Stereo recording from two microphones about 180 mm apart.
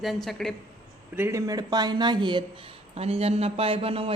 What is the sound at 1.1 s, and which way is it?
Speech, 15° right (ahead or behind).